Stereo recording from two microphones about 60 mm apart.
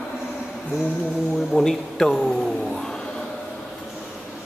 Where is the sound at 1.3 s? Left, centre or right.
Centre.